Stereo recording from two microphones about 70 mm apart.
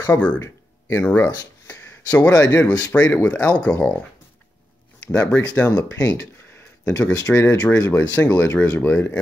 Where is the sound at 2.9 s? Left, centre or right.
Left.